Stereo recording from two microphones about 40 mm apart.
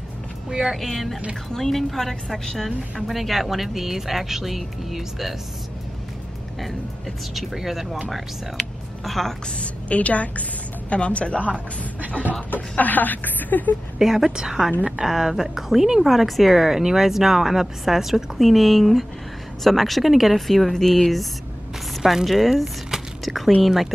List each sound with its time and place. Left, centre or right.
0.5 s speech: centre
0.7 s a woman's voice: centre
7.3 s a woman's voice: centre
9.6 s a woman's voice: left
11.4 s speech: right
12.4 s speech: left
13.9 s a woman's voice: centre